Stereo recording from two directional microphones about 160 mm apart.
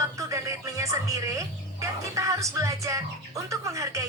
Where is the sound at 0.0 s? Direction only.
20° right (ahead or behind).